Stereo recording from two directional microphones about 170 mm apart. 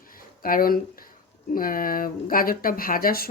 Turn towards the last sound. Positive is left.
turn(degrees=60)  # may be behind; listen again after turning